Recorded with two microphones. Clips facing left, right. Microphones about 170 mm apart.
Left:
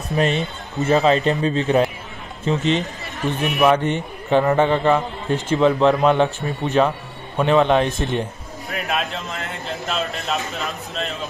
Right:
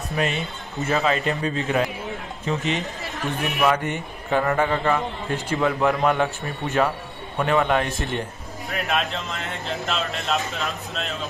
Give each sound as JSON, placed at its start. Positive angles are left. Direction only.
{"t": 0.1, "sound": "speech", "side_deg": 35}
{"t": 3.4, "sound": "a man's voice", "side_deg": 20}
{"t": 8.6, "sound": "speech", "side_deg": 0}